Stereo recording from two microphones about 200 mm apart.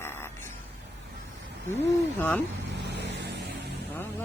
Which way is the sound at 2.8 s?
60° right (ahead or behind).